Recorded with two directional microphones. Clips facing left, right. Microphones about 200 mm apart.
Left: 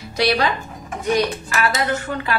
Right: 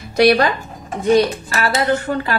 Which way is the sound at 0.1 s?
50° right (ahead or behind).